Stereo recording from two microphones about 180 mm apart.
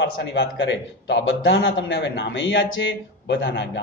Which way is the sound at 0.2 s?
75° left (ahead or behind).